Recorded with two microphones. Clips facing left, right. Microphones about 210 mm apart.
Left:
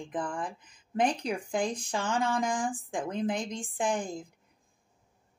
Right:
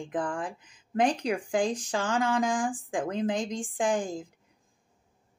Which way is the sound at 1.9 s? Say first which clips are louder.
Right 1 dB; 90° right.